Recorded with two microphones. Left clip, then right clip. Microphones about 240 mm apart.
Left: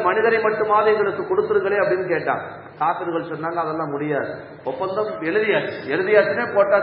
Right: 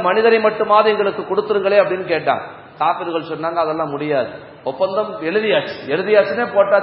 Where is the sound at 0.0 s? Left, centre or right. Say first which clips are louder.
Right 4 dB; right.